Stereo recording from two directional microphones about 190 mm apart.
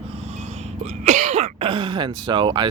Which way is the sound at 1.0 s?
40° right (ahead or behind).